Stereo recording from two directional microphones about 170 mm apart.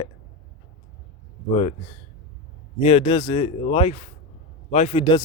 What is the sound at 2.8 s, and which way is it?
Speech, 30° left (ahead or behind).